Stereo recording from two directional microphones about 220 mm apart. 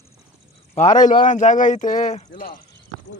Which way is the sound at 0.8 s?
35° left (ahead or behind).